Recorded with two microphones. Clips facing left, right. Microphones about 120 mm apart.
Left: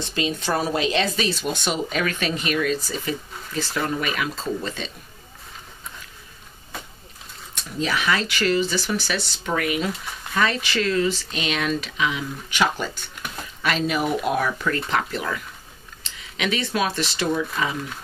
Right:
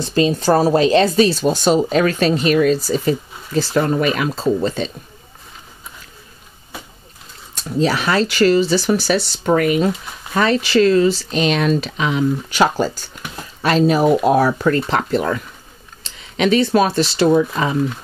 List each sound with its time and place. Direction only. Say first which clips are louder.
0.0 s speech: right 9 dB; 35° right (ahead or behind)
7.5 s speech: right 8 dB; 35° right (ahead or behind)
13.1 s a sound: right 2 dB; centre (ahead or behind)
13.6 s speech: right 9 dB; 35° right (ahead or behind)